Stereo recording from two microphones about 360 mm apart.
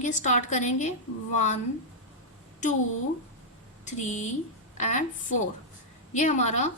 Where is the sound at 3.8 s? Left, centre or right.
Centre.